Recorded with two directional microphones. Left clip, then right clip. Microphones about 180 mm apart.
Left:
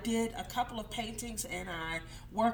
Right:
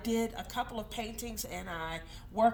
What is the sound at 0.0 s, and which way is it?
A woman's voice, 40° right (ahead or behind).